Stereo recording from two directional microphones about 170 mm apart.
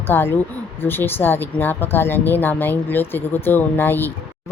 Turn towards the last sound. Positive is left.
turn(degrees=10)  # may be behind; listen again after turning